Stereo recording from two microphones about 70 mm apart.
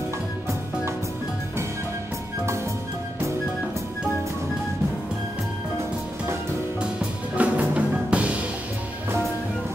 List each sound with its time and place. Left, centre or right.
7.3 s music: right